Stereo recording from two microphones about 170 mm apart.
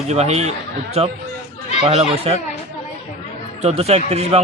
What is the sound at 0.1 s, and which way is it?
Speech, 40° right (ahead or behind).